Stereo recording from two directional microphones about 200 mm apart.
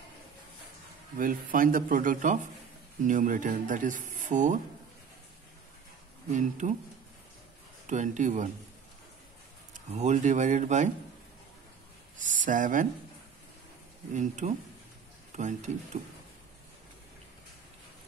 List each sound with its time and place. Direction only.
1.1 s speech: 45° right (ahead or behind)
6.3 s speech: 35° right (ahead or behind)
7.8 s speech: 35° right (ahead or behind)
9.8 s speech: 35° right (ahead or behind)
12.2 s speech: 40° right (ahead or behind)
14.1 s speech: 35° right (ahead or behind)